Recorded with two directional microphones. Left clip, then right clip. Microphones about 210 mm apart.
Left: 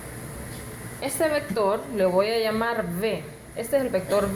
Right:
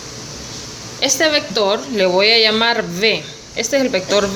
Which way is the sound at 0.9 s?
20° right (ahead or behind).